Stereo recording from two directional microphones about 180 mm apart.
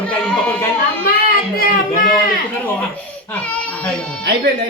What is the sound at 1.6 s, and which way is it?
Speech, 50° left (ahead or behind).